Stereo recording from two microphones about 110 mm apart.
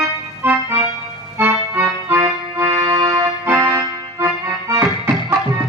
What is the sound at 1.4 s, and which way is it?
Accordion, 20° right (ahead or behind).